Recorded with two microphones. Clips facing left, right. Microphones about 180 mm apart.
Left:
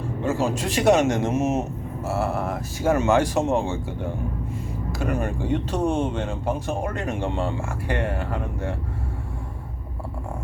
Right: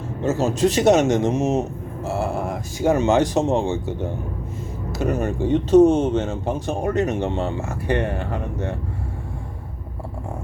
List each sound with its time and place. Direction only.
0.3 s speech: 20° right (ahead or behind)
4.9 s speech: 20° right (ahead or behind)